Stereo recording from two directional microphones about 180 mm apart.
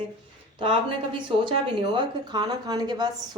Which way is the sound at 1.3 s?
30° right (ahead or behind).